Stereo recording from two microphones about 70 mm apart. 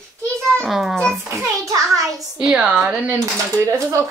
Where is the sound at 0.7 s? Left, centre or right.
Centre.